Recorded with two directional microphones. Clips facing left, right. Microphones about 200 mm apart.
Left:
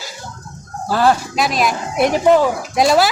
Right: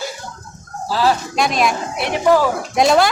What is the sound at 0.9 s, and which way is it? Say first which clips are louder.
Speech: left 2 dB; 55° left (ahead or behind).